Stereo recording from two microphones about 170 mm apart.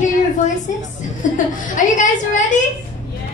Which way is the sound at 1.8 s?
45° left (ahead or behind).